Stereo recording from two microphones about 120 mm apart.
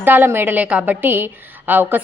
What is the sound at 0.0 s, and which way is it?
A woman's voice, 15° right (ahead or behind).